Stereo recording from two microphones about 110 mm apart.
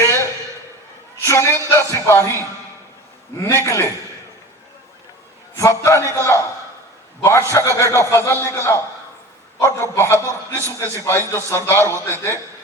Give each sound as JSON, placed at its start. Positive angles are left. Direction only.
{"t": 0.0, "sound": "a sound", "side_deg": 25}
{"t": 1.2, "sound": "speech", "side_deg": 25}
{"t": 3.4, "sound": "speech", "side_deg": 25}
{"t": 5.5, "sound": "speech", "side_deg": 30}